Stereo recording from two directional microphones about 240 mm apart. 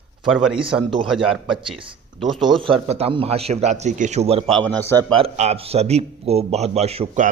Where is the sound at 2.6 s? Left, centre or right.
Right.